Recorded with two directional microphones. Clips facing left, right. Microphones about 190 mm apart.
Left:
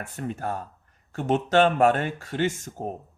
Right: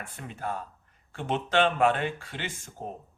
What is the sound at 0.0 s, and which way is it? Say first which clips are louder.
A man's voice: left 6 dB; 45° left (ahead or behind).